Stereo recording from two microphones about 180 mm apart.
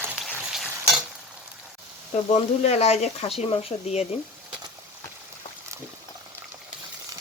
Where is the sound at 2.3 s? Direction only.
35° left (ahead or behind).